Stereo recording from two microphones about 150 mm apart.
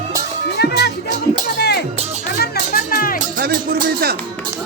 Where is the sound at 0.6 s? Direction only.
90° left.